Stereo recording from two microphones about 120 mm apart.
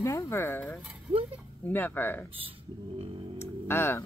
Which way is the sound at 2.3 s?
50° right (ahead or behind).